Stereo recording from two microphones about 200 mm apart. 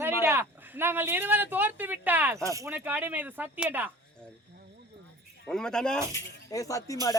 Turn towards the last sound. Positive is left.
turn(degrees=15)  # may be behind; listen again after turning